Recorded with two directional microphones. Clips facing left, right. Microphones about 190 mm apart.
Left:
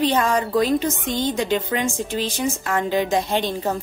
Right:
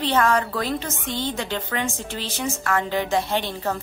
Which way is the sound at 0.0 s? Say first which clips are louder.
Left 1 dB; 15° left (ahead or behind).